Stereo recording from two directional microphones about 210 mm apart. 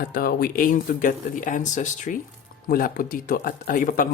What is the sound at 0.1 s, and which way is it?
Speech, 45° left (ahead or behind).